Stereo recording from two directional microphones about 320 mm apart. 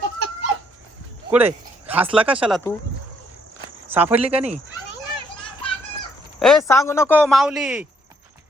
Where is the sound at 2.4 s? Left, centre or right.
Centre.